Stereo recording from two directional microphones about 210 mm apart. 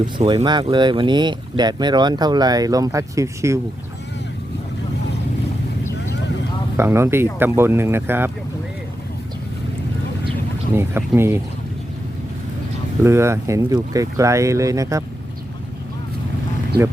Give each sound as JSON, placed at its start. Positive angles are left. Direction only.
{"t": 0.3, "sound": "speech", "side_deg": -20}
{"t": 6.7, "sound": "speech", "side_deg": -10}
{"t": 10.8, "sound": "speech", "side_deg": -10}
{"t": 13.0, "sound": "speech", "side_deg": -10}